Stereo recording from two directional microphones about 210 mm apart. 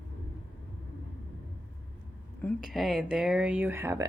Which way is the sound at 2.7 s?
Centre (ahead or behind).